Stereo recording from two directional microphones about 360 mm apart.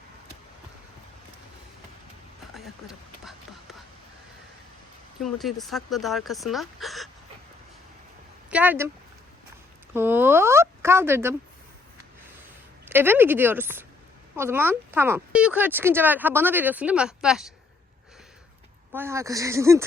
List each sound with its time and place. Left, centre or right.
2.6 s a sound: centre
5.2 s speech: centre
8.4 s speech: centre
9.9 s speech: centre
12.9 s speech: centre
18.9 s speech: centre